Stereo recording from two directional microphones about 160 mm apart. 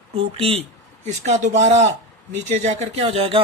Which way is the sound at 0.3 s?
40° right (ahead or behind).